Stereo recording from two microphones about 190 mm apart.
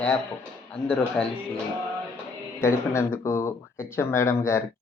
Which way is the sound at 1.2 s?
5° left (ahead or behind).